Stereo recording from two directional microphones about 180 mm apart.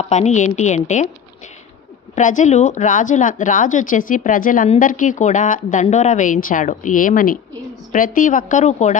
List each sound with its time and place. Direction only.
0.1 s a woman's voice: 40° left (ahead or behind)
2.1 s a woman's voice: 45° left (ahead or behind)